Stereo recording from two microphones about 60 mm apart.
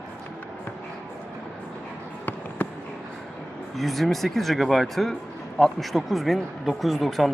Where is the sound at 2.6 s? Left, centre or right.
Left.